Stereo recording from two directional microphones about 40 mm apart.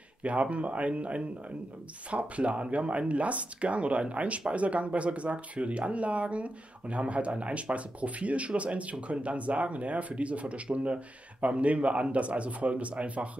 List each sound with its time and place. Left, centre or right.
0.2 s speech: right